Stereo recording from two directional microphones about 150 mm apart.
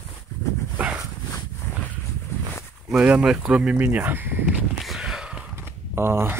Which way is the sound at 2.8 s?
5° right (ahead or behind).